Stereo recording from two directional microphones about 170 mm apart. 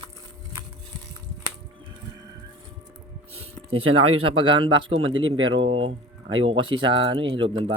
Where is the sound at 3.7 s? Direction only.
35° right (ahead or behind).